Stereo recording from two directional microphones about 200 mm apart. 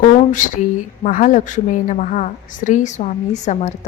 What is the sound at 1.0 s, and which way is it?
A woman's voice, 40° left (ahead or behind).